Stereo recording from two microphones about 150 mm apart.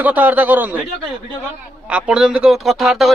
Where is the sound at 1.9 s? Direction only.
5° right (ahead or behind).